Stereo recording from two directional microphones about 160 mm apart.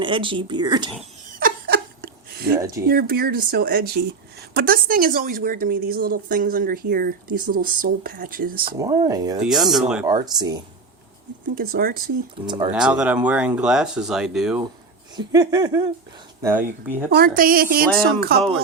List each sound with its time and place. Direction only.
0.0 s speech: 30° right (ahead or behind)
1.4 s laughter: 65° right (ahead or behind)
2.8 s a woman's voice: 70° right (ahead or behind)
8.8 s a sound: 20° right (ahead or behind)
9.4 s speech: centre (ahead or behind)
10.1 s a sound: 25° right (ahead or behind)
11.5 s a woman's voice: 70° right (ahead or behind)
12.5 s a sound: 30° right (ahead or behind)
12.7 s speech: 5° right (ahead or behind)
15.1 s a sound: 25° right (ahead or behind)
16.4 s speech: 15° right (ahead or behind)
17.2 s a woman's voice: 60° right (ahead or behind)